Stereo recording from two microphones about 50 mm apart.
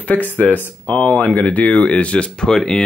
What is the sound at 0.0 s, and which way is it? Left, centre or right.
Speech, left.